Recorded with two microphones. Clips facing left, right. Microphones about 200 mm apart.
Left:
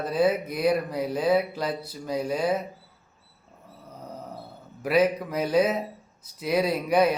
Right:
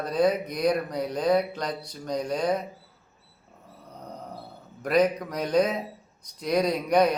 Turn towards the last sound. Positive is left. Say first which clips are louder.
# even
turn(degrees=5)  # may be behind; listen again after turning